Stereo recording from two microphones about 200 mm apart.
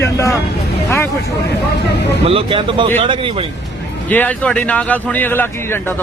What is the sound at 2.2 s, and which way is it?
Speech, 30° right (ahead or behind).